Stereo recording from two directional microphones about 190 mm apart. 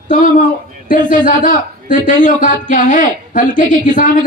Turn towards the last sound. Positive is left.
turn(degrees=45)  # may be behind; listen again after turning